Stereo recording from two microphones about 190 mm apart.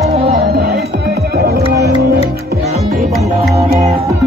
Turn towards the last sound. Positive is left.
turn(degrees=-35)  # may be behind; listen again after turning